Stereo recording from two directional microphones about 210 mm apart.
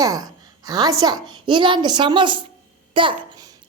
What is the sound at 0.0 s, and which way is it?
A woman's voice, 15° right (ahead or behind).